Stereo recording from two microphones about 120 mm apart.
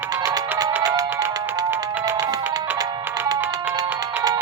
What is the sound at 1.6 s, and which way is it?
Music, 15° right (ahead or behind).